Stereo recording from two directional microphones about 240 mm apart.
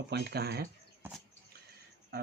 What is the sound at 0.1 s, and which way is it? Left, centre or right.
Speech, right.